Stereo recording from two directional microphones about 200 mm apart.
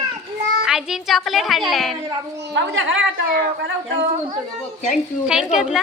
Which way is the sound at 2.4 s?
60° right (ahead or behind).